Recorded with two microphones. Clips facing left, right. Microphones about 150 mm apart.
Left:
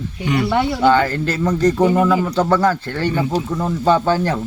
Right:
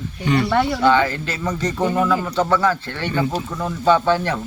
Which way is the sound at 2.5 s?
45° left (ahead or behind).